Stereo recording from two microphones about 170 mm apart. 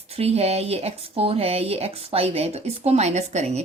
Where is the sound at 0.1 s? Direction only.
35° right (ahead or behind).